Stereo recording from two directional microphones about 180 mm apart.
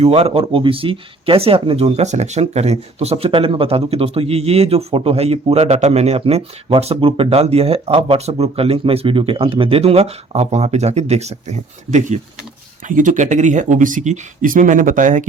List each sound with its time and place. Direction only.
0.0 s speech: 35° right (ahead or behind)